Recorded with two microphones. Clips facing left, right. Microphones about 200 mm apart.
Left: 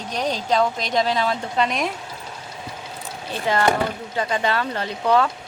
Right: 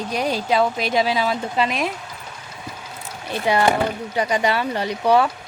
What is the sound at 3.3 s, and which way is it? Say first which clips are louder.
A woman's voice: right 2 dB; 15° right (ahead or behind).